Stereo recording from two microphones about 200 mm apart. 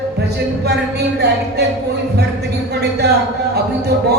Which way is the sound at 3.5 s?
55° right (ahead or behind).